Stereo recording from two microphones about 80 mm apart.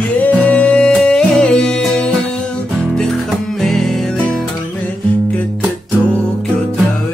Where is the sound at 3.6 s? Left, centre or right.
Centre.